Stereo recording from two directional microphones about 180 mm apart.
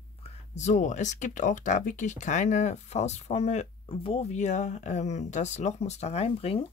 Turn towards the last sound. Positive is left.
turn(degrees=35)  # may be behind; listen again after turning